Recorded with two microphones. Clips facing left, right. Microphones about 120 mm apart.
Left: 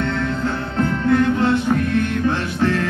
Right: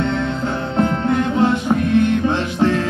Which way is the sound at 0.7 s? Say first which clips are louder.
Left 1 dB; 20° right (ahead or behind).